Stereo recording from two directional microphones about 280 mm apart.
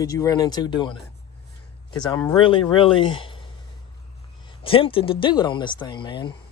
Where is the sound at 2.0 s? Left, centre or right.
Centre.